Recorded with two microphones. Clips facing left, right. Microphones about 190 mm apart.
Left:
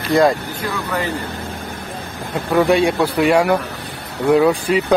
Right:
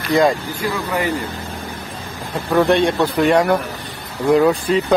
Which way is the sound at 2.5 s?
10° left (ahead or behind).